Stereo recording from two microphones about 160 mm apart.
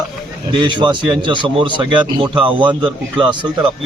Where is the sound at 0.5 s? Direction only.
30° right (ahead or behind).